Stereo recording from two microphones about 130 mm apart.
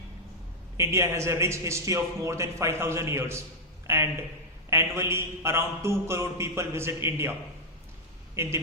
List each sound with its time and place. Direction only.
0.8 s a man's voice: 20° right (ahead or behind)
8.4 s a man's voice: 20° right (ahead or behind)